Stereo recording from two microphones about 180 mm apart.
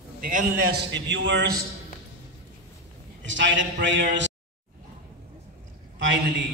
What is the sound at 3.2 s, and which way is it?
A man's voice, 90° right.